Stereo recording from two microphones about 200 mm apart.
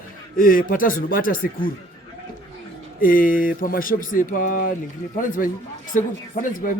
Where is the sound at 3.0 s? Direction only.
45° left (ahead or behind).